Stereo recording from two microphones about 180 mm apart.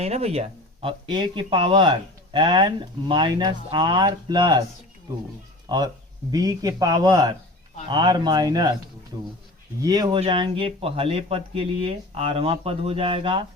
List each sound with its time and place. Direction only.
0.0 s speech: 35° right (ahead or behind)
5.6 s speech: 25° right (ahead or behind)
9.8 s speech: 20° right (ahead or behind)